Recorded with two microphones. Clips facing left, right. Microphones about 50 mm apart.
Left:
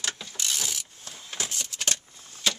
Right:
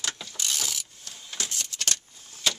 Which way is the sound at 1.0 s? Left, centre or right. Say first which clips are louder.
Left 3 dB; left.